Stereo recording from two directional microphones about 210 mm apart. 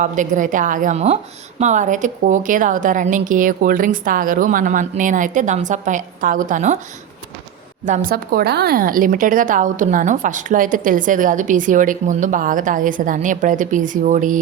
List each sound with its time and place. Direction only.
0.0 s speech: 40° right (ahead or behind)
7.9 s speech: 40° right (ahead or behind)